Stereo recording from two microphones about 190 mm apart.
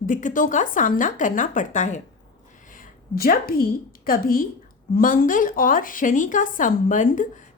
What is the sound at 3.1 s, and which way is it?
A woman's voice, 50° left (ahead or behind).